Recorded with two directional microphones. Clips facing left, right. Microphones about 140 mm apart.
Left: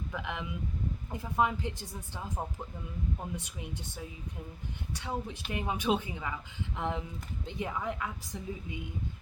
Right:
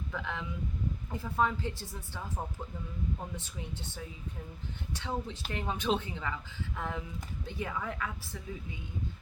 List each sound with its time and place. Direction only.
0.1 s a sound: 15° left (ahead or behind)
1.1 s speech: 15° left (ahead or behind)
3.3 s a woman's voice: 10° left (ahead or behind)